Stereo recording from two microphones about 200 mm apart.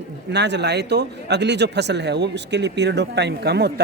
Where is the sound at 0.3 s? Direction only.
60° right (ahead or behind).